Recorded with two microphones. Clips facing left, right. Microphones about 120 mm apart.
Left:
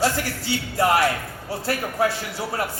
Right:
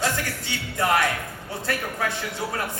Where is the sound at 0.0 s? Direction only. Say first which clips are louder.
Left 4 dB; 35° left (ahead or behind).